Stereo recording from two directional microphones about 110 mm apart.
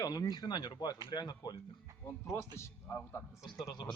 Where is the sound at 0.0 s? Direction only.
35° left (ahead or behind).